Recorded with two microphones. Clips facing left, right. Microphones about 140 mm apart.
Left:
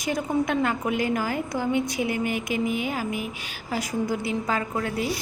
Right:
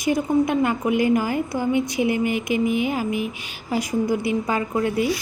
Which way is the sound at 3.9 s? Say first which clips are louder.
Right 5 dB; 15° right (ahead or behind).